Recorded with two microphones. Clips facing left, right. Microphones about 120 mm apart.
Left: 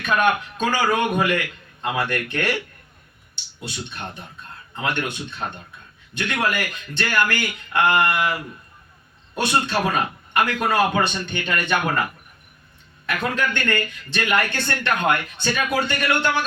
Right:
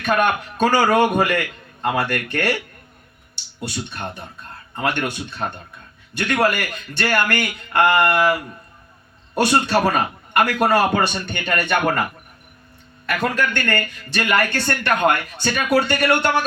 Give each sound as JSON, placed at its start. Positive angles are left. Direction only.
{"t": 0.0, "sound": "a man's voice", "side_deg": -55}
{"t": 3.6, "sound": "a man's voice", "side_deg": -50}
{"t": 6.1, "sound": "a man's voice", "side_deg": -50}
{"t": 13.1, "sound": "a man's voice", "side_deg": -50}